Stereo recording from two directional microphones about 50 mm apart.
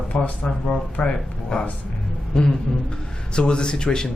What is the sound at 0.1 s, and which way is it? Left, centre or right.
Speech, left.